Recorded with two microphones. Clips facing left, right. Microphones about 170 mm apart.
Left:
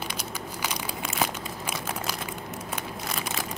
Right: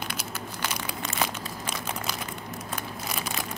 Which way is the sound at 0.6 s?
10° left (ahead or behind).